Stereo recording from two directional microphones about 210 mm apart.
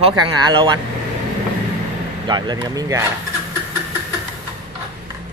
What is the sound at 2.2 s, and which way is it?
Speech, 20° right (ahead or behind).